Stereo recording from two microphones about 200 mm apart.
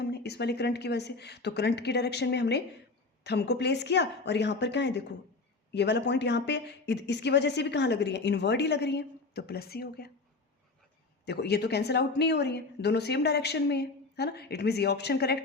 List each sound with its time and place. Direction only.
0.0 s speech: 55° left (ahead or behind)
11.3 s speech: 55° left (ahead or behind)